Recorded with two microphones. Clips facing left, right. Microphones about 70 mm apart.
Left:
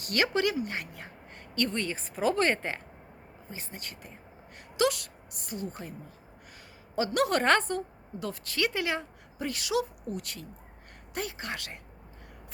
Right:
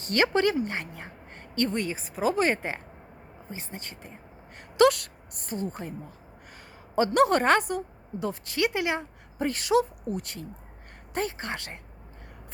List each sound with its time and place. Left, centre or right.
0.0 s a woman's voice: right
1.8 s a woman's voice: centre; by 4.1 s right
4.8 s a woman's voice: right
6.9 s a woman's voice: right
7.2 s a woman's voice: right
7.4 s speech: centre
8.2 s a woman's voice: right
9.4 s a woman's voice: right